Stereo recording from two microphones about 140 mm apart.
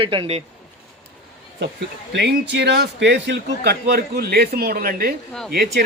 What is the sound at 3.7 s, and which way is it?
A man's voice, 90° right.